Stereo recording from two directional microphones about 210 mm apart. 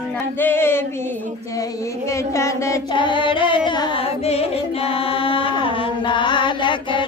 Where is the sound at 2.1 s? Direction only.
15° left (ahead or behind).